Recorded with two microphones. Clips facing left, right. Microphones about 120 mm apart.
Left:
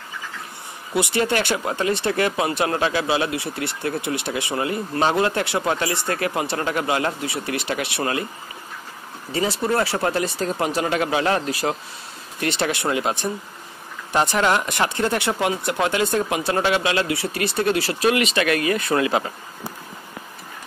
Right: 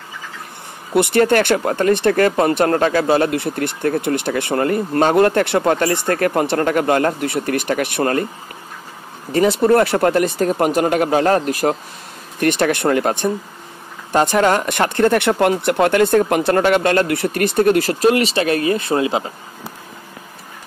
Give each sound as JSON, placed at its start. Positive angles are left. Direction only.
{"t": 0.9, "sound": "speech", "side_deg": -55}
{"t": 9.6, "sound": "speech", "side_deg": -55}